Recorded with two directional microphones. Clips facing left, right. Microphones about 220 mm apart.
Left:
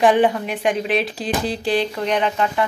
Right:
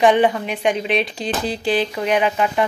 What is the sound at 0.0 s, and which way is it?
Speech, centre (ahead or behind).